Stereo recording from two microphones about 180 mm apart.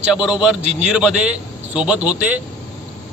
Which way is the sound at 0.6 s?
35° right (ahead or behind).